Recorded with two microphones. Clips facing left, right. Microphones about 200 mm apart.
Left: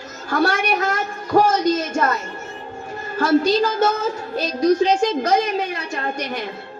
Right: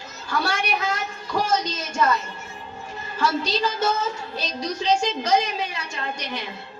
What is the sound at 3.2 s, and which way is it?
A woman's voice, 55° left (ahead or behind).